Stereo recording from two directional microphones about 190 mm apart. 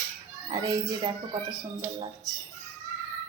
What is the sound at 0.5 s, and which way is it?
Speech, 20° right (ahead or behind).